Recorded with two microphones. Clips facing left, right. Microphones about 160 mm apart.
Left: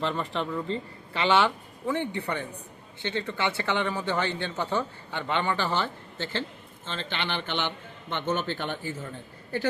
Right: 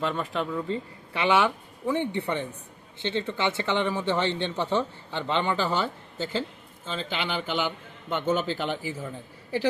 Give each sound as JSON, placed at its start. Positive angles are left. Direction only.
{"t": 0.0, "sound": "speech", "side_deg": -5}
{"t": 5.7, "sound": "speech", "side_deg": -5}